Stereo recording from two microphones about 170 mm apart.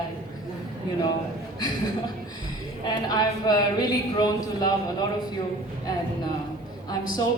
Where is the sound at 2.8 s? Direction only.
25° left (ahead or behind).